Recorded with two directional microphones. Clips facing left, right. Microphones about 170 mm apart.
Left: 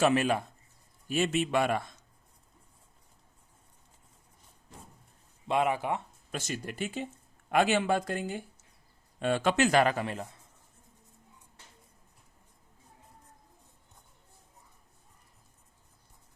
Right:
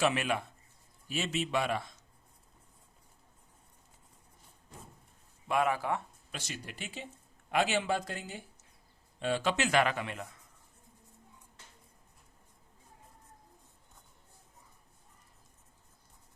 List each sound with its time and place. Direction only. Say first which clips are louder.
0.0 s a man's voice: left 5 dB; 40° left (ahead or behind)
1.0 s speech: left 6 dB; 50° left (ahead or behind)
5.5 s speech: left 2 dB; 20° left (ahead or behind)
6.3 s a man's voice: left 7 dB; 45° left (ahead or behind); by 10.5 s 30° left (ahead or behind)